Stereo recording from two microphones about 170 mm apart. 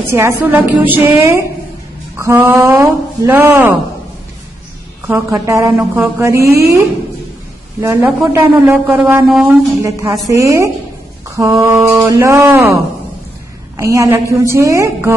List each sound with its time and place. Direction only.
0.1 s a woman's voice: 15° right (ahead or behind)
5.0 s a woman's voice: 15° right (ahead or behind)
9.8 s a woman's voice: 20° right (ahead or behind)